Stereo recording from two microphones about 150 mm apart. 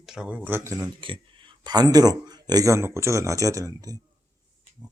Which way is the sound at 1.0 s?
35° right (ahead or behind).